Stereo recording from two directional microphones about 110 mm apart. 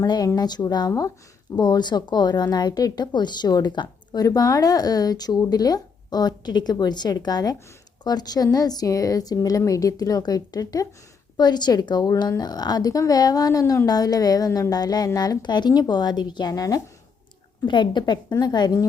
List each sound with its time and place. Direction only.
0.0 s speech: 35° left (ahead or behind)
17.7 s speech: 45° left (ahead or behind)